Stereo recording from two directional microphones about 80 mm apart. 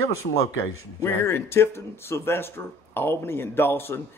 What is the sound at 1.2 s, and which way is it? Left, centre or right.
A man's voice, left.